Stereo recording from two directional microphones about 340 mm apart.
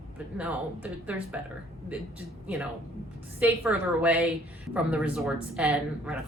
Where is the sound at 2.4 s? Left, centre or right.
Centre.